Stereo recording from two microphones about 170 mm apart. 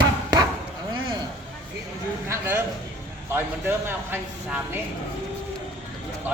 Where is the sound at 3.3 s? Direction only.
10° right (ahead or behind).